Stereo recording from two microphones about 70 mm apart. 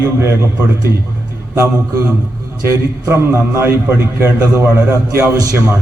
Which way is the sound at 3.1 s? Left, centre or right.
Right.